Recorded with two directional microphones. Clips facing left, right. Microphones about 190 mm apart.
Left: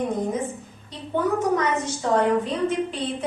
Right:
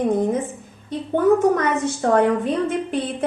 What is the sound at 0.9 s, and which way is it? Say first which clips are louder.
A woman's voice: right 7 dB; 55° right (ahead or behind).